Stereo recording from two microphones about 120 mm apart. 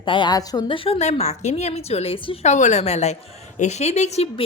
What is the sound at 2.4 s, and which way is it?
Speech, 85° left.